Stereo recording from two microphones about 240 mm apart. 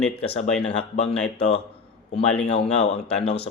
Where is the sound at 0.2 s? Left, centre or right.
Left.